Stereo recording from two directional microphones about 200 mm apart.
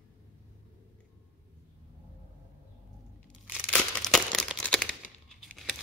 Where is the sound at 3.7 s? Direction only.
Centre (ahead or behind).